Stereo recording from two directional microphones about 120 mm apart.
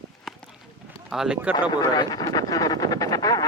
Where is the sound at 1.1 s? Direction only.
5° right (ahead or behind).